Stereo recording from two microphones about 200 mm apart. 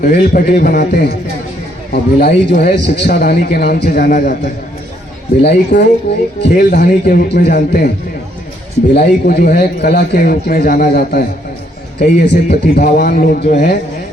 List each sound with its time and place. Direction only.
0.0 s a man's voice: 50° left (ahead or behind)
5.4 s a man's voice: 55° left (ahead or behind)
9.0 s a man's voice: 50° left (ahead or behind)
12.3 s a man's voice: 50° left (ahead or behind)